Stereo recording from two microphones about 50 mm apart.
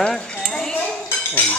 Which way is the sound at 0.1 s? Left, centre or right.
Centre.